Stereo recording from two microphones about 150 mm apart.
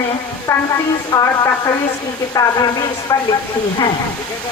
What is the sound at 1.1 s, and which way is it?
Speech, 25° left (ahead or behind).